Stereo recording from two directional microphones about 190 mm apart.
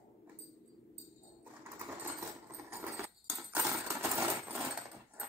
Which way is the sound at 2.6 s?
15° right (ahead or behind).